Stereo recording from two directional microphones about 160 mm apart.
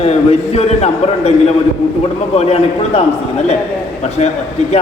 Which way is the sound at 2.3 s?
40° left (ahead or behind).